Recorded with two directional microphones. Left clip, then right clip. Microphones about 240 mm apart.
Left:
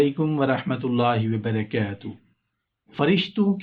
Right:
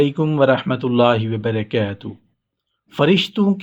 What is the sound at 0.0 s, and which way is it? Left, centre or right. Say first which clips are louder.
Speech: right 6 dB; right.